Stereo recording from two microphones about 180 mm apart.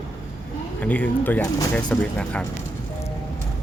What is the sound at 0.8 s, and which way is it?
Speech, 10° left (ahead or behind).